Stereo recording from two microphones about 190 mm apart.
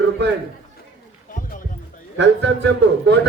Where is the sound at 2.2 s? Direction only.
70° right (ahead or behind).